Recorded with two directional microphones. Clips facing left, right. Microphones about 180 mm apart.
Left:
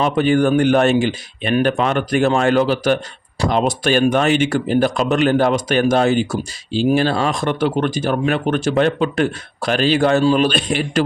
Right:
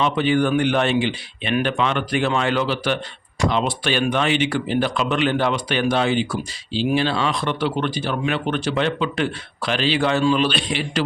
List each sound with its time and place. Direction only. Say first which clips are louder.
0.0 s speech: left 4 dB; 45° left (ahead or behind)